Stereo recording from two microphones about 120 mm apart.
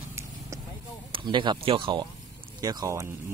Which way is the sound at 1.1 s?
45° right (ahead or behind).